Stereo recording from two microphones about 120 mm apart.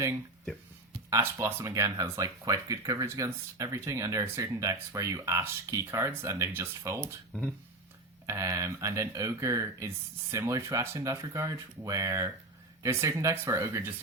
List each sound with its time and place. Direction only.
1.1 s speech: 20° right (ahead or behind)
8.3 s speech: 25° right (ahead or behind)